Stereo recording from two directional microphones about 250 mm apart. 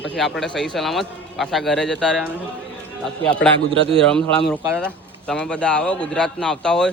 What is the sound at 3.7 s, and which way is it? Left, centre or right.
Speech, right.